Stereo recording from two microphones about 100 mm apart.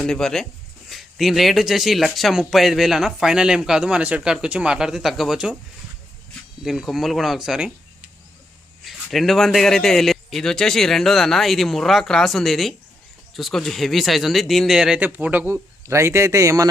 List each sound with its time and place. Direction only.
0.0 s speech: 5° left (ahead or behind)
6.7 s speech: 5° right (ahead or behind)
15.0 s speech: 20° right (ahead or behind)